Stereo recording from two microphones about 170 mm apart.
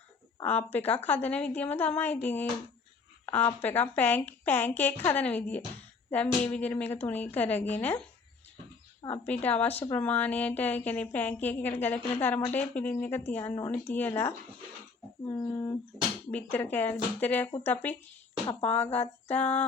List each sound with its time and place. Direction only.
0.4 s a woman's voice: 10° left (ahead or behind)
3.6 s a woman's voice: 10° left (ahead or behind)
6.1 s a sound: 10° left (ahead or behind)
6.5 s a woman's voice: 10° left (ahead or behind)
9.2 s a woman's voice: 10° left (ahead or behind)
16.3 s a woman's voice: 10° left (ahead or behind)